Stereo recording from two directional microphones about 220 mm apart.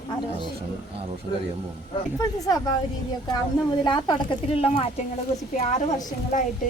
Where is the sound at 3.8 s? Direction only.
20° left (ahead or behind).